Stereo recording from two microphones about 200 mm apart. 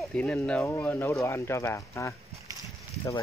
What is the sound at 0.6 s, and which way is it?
Speech, 10° left (ahead or behind).